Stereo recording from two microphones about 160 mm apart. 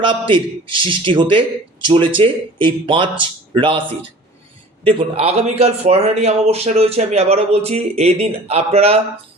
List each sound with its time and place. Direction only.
0.0 s speech: 30° right (ahead or behind)